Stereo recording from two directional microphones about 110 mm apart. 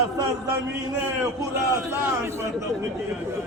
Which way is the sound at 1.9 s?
25° right (ahead or behind).